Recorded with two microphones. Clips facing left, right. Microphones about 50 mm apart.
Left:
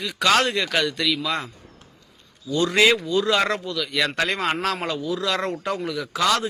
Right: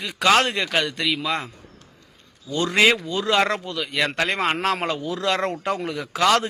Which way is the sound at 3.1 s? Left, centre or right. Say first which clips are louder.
Even; right.